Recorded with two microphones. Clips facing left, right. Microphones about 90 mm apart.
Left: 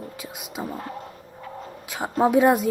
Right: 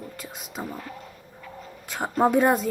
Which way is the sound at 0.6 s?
35° left (ahead or behind).